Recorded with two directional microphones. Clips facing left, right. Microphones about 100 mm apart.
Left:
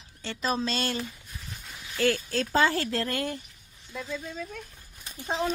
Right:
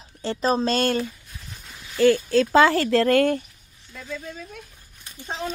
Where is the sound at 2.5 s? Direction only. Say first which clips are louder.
Right 6 dB; 90° right; by 3.4 s 60° right (ahead or behind).